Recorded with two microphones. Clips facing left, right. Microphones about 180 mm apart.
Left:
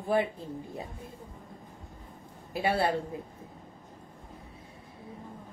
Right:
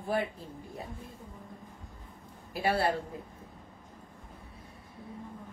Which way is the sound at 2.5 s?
25° left (ahead or behind).